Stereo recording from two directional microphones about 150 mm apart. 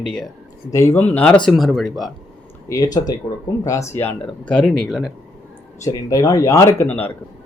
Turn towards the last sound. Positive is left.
turn(degrees=10)  # may be behind; listen again after turning